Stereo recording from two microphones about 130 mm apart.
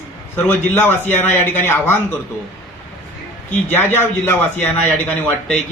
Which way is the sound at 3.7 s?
15° left (ahead or behind).